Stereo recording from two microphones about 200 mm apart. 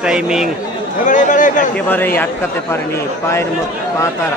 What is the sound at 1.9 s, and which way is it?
A man's voice, 10° left (ahead or behind).